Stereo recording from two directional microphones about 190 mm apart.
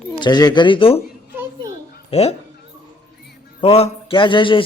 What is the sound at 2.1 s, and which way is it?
Speech, 35° left (ahead or behind).